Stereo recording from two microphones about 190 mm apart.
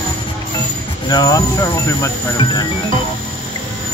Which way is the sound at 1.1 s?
20° left (ahead or behind).